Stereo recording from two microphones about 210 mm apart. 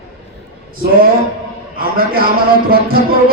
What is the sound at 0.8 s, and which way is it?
A man's voice, 45° right (ahead or behind).